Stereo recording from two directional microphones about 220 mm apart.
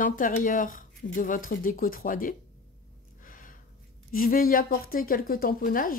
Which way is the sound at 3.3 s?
35° left (ahead or behind).